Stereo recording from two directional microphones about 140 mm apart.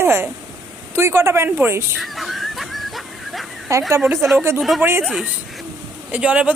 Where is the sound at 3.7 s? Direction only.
25° right (ahead or behind).